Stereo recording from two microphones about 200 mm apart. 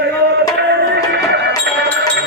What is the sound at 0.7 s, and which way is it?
Music, 60° right (ahead or behind).